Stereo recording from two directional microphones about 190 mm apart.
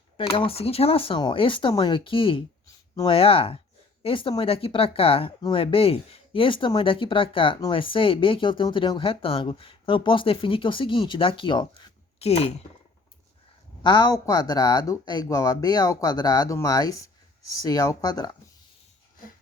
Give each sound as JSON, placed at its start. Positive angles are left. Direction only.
{"t": 0.2, "sound": "speech", "side_deg": 30}
{"t": 13.8, "sound": "speech", "side_deg": 25}